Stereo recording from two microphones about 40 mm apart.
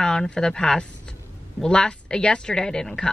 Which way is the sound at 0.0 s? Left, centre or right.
Centre.